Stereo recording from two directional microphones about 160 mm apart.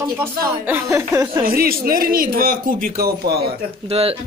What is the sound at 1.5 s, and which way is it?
Speech, 65° right (ahead or behind).